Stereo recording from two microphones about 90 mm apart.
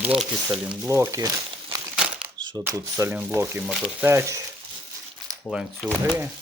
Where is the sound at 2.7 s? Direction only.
35° right (ahead or behind).